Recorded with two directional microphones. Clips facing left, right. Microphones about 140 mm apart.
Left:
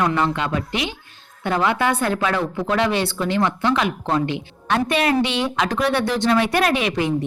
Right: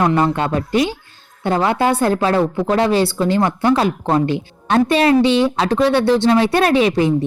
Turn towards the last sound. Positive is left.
turn(degrees=-35)  # may be behind; listen again after turning